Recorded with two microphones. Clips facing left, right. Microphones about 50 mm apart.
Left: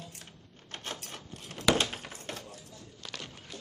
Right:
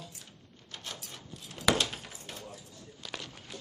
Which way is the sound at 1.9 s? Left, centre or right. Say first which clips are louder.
Left 3 dB; left.